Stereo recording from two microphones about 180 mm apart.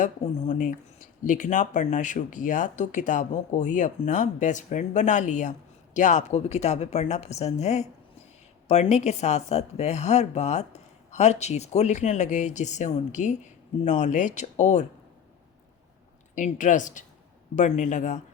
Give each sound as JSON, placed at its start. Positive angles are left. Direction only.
{"t": 0.0, "sound": "a woman's voice", "side_deg": 45}
{"t": 16.3, "sound": "speech", "side_deg": 45}